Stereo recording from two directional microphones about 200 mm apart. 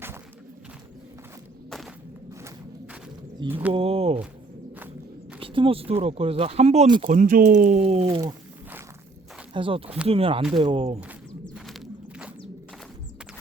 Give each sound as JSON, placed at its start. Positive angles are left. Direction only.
{"t": 3.7, "sound": "speech", "side_deg": -30}
{"t": 5.4, "sound": "speech", "side_deg": -25}
{"t": 7.1, "sound": "speech", "side_deg": -40}
{"t": 9.5, "sound": "speech", "side_deg": -25}
{"t": 11.4, "sound": "a sound", "side_deg": 0}